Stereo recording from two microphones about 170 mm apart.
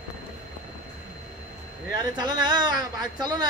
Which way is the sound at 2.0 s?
25° right (ahead or behind).